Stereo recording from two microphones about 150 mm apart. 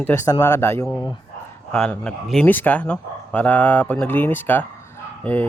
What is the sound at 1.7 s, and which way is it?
Speech, 5° left (ahead or behind).